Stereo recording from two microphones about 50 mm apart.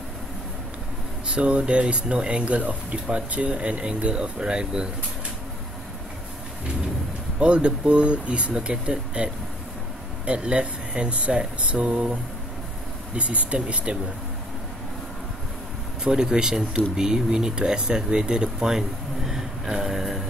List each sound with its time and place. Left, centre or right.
1.2 s speech: right
7.3 s speech: right
13.1 s speech: right
16.0 s speech: centre